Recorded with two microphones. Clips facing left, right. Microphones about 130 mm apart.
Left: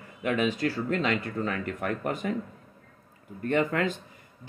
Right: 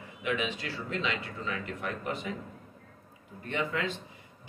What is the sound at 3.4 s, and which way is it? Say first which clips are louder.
Speech: left 7 dB; 50° left (ahead or behind).